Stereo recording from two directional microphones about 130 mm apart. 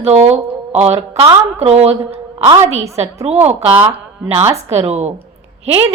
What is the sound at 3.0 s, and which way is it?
Speech, 50° right (ahead or behind).